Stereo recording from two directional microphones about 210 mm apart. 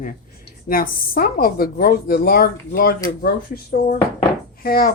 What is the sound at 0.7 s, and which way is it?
A woman's voice, 45° left (ahead or behind).